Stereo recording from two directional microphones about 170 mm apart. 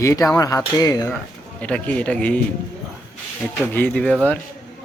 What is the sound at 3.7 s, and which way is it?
Speech, 10° left (ahead or behind).